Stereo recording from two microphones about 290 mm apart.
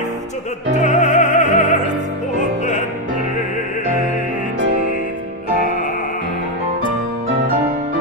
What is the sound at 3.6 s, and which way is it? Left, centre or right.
Music, left.